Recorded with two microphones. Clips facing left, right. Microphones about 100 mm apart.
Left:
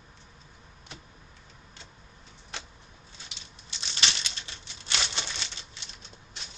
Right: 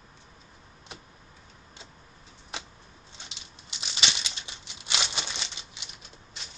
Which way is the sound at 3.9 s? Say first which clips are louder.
Even; 15° right (ahead or behind).